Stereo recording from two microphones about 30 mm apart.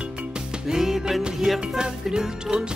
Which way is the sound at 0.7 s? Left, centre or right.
Centre.